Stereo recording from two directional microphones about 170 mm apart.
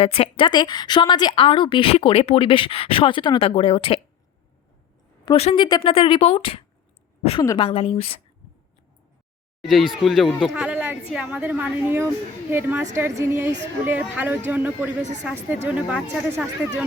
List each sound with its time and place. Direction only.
0.0 s a woman's voice: 35° left (ahead or behind)
5.2 s a woman's voice: 30° left (ahead or behind)
9.6 s a woman's voice: centre (ahead or behind)